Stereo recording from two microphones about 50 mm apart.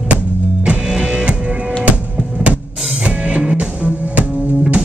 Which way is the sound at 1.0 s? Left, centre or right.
Centre.